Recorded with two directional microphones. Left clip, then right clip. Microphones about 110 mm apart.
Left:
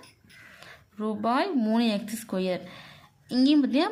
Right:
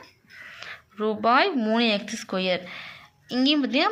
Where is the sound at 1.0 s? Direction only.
40° left (ahead or behind).